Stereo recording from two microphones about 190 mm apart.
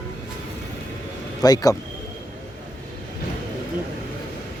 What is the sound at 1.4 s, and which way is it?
Speech, 20° left (ahead or behind).